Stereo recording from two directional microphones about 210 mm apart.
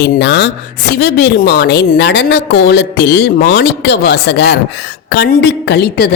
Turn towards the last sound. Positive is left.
turn(degrees=50)  # may be behind; listen again after turning